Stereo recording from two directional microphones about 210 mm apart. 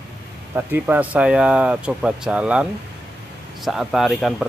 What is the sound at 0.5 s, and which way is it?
Speech, 10° right (ahead or behind).